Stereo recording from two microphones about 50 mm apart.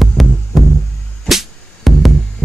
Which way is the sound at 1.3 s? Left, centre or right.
Centre.